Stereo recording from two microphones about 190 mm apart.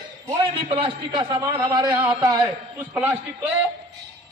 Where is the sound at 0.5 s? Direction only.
25° right (ahead or behind); by 3.5 s 10° right (ahead or behind).